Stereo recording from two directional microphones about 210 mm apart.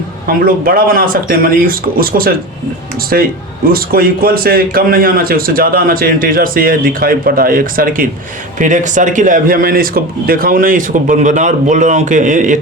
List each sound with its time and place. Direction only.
0.3 s a man's voice: 45° right (ahead or behind)